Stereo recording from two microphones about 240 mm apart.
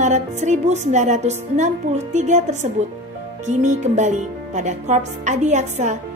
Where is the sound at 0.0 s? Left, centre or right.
Right.